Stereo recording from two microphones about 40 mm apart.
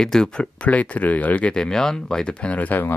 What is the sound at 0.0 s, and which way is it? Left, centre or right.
Speech, centre.